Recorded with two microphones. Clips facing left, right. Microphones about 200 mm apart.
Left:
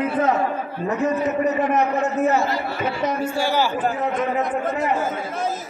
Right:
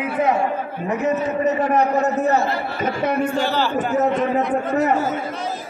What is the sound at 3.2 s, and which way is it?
Speech, 10° left (ahead or behind).